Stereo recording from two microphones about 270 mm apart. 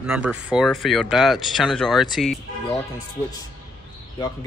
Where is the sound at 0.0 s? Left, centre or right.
Centre.